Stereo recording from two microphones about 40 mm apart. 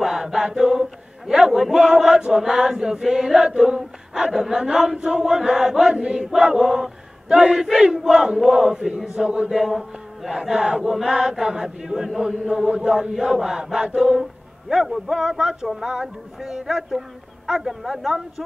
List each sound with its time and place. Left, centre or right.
0.0 s chant: centre
9.5 s chant: centre